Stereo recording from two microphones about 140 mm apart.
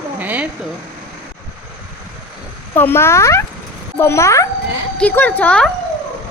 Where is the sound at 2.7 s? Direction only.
15° left (ahead or behind).